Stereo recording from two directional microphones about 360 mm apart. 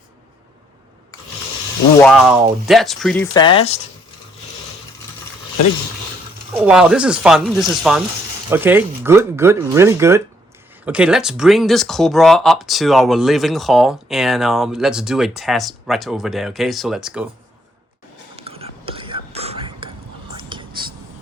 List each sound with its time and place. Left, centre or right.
2.0 s speech: centre
6.5 s speech: centre
18.3 s whispering: centre